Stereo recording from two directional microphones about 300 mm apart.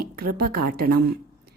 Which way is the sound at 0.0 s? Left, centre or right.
Right.